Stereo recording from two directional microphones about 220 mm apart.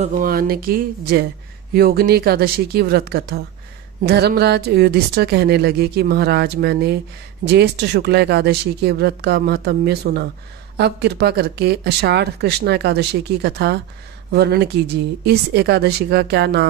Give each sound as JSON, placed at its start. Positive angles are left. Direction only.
{"t": 0.0, "sound": "speech", "side_deg": -40}